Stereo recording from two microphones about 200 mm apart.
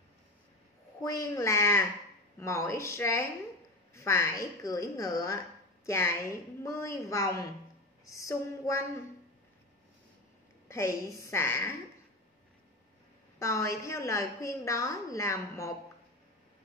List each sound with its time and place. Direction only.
1.0 s a woman's voice: 15° left (ahead or behind)
10.7 s a woman's voice: 15° left (ahead or behind)
13.4 s a woman's voice: 15° left (ahead or behind)